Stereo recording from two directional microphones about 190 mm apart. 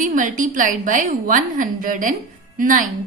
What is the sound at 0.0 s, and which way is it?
A woman's voice, 45° right (ahead or behind).